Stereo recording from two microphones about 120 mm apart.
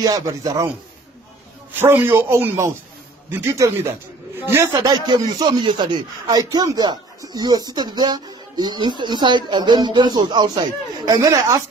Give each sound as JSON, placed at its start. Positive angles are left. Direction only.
{"t": 0.0, "sound": "speech", "side_deg": -30}
{"t": 1.7, "sound": "a man's voice", "side_deg": -15}
{"t": 4.8, "sound": "speech", "side_deg": -35}